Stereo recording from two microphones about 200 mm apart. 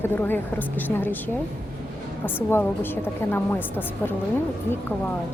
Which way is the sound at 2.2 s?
10° left (ahead or behind).